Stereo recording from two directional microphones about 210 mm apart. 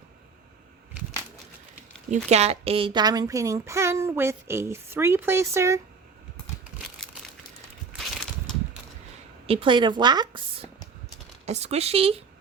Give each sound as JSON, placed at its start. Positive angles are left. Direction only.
{"t": 2.0, "sound": "a woman's voice", "side_deg": -30}
{"t": 9.5, "sound": "a woman's voice", "side_deg": -25}
{"t": 11.4, "sound": "a woman's voice", "side_deg": -30}